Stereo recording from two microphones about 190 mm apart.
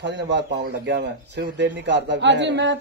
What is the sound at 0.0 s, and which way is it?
Speech, 65° right (ahead or behind).